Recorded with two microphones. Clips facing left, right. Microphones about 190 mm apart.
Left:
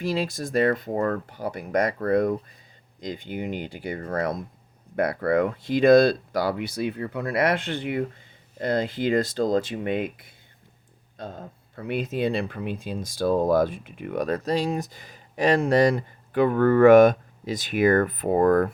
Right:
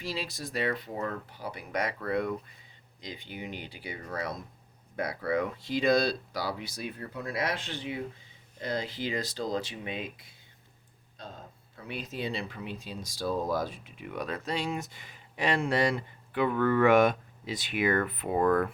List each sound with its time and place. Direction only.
0.0 s speech: 55° left (ahead or behind)